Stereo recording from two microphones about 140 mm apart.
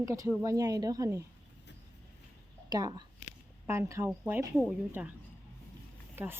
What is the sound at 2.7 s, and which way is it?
A woman's voice, 30° right (ahead or behind).